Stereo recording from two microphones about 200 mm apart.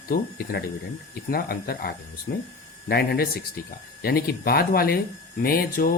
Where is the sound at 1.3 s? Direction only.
50° left (ahead or behind).